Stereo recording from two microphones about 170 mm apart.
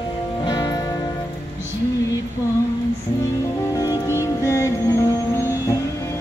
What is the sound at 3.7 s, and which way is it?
Music, 20° left (ahead or behind).